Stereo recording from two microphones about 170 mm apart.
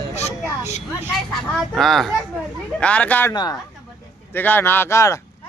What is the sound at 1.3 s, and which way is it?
Speech, centre (ahead or behind).